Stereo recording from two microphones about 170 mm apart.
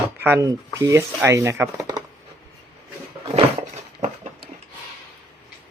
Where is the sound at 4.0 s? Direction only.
45° right (ahead or behind).